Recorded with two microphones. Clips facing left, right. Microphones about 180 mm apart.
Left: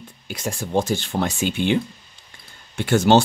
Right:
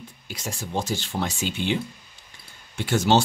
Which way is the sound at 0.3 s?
55° left (ahead or behind).